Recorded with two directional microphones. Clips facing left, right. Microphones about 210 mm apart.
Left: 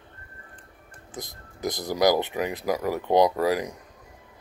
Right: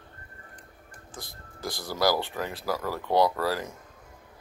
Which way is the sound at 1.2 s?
20° left (ahead or behind).